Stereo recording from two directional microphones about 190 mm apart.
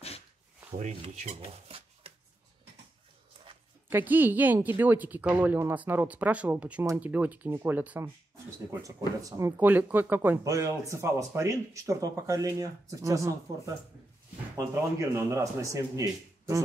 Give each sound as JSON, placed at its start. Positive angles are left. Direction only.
{"t": 0.7, "sound": "speech", "side_deg": -35}
{"t": 3.9, "sound": "speech", "side_deg": -10}
{"t": 14.5, "sound": "speech", "side_deg": -15}